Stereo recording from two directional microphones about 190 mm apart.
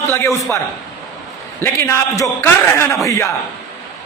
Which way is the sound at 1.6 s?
15° left (ahead or behind).